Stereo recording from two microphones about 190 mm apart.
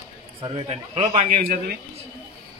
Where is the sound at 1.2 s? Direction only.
50° right (ahead or behind).